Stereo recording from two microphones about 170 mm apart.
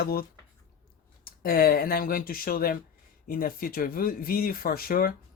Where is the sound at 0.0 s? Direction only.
60° left (ahead or behind).